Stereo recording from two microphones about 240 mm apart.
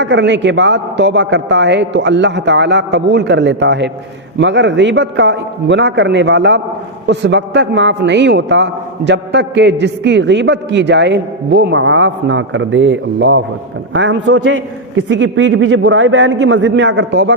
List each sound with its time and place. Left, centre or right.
0.0 s a man's voice: right